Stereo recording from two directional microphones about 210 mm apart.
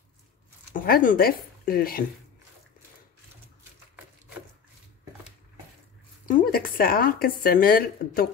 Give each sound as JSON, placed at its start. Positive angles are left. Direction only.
{"t": 0.8, "sound": "speech", "side_deg": 45}
{"t": 6.2, "sound": "speech", "side_deg": 40}